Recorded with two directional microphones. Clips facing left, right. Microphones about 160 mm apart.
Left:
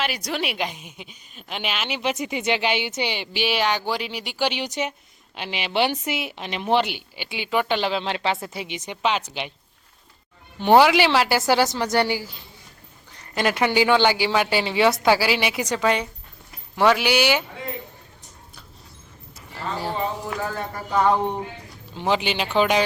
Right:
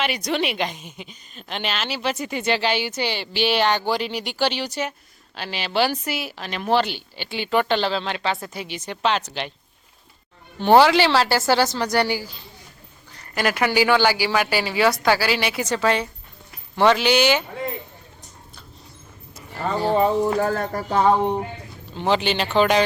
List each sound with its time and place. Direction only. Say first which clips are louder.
0.0 s a woman's voice: right 3 dB; 5° left (ahead or behind)
10.6 s a woman's voice: right 1 dB; 15° left (ahead or behind)
19.6 s speech: right 7 dB; 55° right (ahead or behind)
21.9 s a woman's voice: right 2 dB; 10° left (ahead or behind)